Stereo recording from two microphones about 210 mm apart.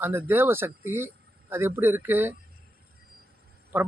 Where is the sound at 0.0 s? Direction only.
10° right (ahead or behind).